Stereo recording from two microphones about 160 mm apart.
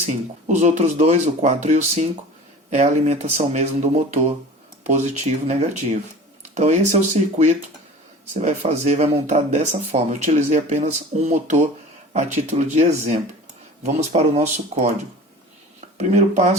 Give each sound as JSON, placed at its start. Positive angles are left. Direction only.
{"t": 0.1, "sound": "speech", "side_deg": -50}
{"t": 5.5, "sound": "speech", "side_deg": -45}
{"t": 16.0, "sound": "speech", "side_deg": -50}